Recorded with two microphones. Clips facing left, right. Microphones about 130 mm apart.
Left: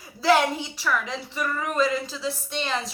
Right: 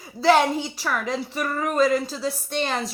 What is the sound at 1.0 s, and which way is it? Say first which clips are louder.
A woman's voice: right 3 dB; 40° right (ahead or behind).